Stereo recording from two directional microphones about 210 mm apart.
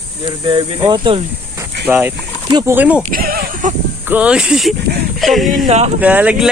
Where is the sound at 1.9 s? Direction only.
10° right (ahead or behind).